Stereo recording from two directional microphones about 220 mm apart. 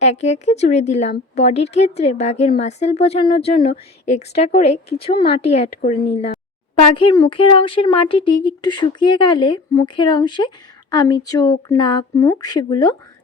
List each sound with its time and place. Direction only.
0.0 s a woman's voice: 30° left (ahead or behind)